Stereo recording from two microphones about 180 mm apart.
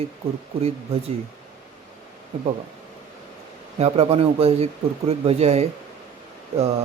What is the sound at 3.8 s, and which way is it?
Speech, 35° right (ahead or behind).